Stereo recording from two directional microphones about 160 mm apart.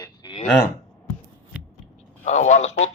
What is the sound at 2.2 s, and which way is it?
Speech, 45° left (ahead or behind).